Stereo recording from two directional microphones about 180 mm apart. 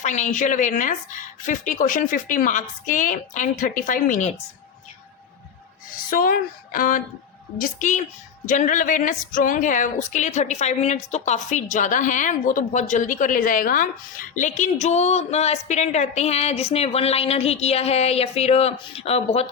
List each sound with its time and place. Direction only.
0.0 s a woman's voice: 40° left (ahead or behind)
6.1 s a woman's voice: 55° left (ahead or behind); by 19.5 s 35° left (ahead or behind)